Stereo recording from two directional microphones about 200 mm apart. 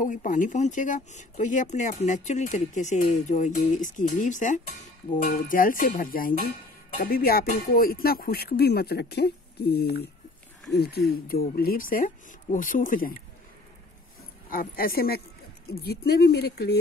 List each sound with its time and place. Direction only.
0.0 s speech: 40° left (ahead or behind)
14.5 s speech: 45° left (ahead or behind)